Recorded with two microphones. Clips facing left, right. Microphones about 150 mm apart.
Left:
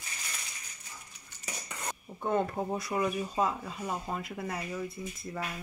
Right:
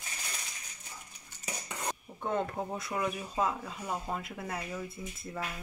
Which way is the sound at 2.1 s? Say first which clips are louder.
Left 4 dB; 5° left (ahead or behind).